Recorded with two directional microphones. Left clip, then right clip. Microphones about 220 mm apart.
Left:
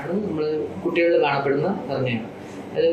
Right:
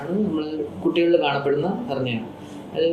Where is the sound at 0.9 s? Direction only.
40° right (ahead or behind).